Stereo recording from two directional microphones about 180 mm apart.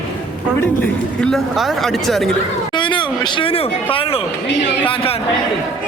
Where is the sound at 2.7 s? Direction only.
25° left (ahead or behind).